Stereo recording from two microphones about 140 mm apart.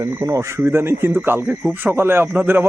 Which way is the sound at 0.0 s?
20° right (ahead or behind).